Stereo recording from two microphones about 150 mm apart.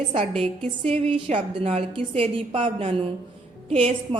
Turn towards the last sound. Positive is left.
turn(degrees=-40)  # may be behind; listen again after turning